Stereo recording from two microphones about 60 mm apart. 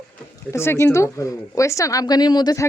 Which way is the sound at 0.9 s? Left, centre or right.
Left.